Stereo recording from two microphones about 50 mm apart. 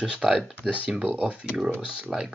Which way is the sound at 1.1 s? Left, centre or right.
Right.